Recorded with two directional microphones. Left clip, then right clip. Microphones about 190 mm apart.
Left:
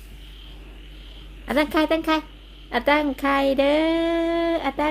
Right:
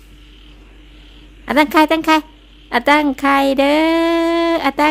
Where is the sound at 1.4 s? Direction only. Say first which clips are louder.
Right 9 dB; 30° right (ahead or behind).